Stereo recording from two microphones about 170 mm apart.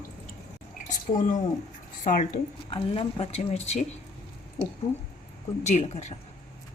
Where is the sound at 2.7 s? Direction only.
30° left (ahead or behind).